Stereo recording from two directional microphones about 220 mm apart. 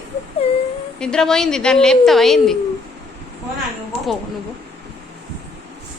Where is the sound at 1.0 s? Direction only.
5° left (ahead or behind).